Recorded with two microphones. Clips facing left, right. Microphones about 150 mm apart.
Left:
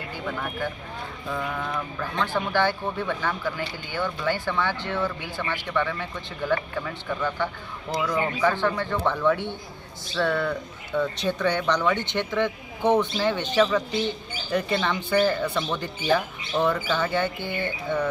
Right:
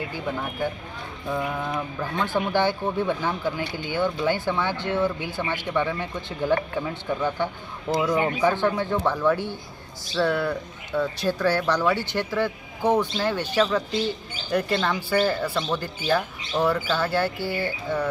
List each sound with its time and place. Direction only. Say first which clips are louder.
1.3 s a man's voice: right 2 dB; 15° right (ahead or behind)